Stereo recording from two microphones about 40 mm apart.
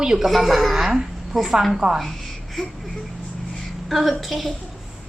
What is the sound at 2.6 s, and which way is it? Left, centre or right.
Speech, centre.